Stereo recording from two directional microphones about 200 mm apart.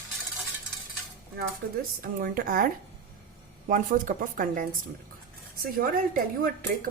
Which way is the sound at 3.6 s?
45° right (ahead or behind).